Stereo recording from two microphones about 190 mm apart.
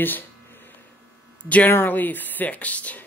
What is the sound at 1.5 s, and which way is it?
Speech, 10° left (ahead or behind).